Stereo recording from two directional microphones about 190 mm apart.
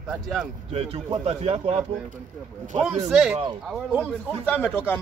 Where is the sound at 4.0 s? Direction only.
10° left (ahead or behind).